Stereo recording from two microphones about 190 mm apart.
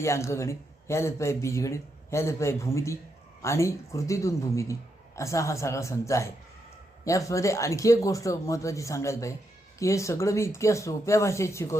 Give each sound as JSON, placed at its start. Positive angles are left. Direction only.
{"t": 0.0, "sound": "speech", "side_deg": 15}